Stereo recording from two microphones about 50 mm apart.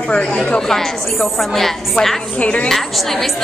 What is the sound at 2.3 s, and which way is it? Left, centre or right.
Speech, left.